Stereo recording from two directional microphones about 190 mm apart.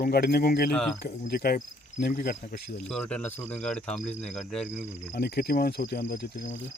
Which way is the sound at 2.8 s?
5° left (ahead or behind).